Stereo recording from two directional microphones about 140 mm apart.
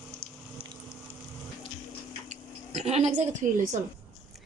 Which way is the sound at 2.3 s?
55° right (ahead or behind).